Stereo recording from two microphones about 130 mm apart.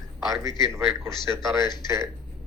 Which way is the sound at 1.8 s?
25° right (ahead or behind).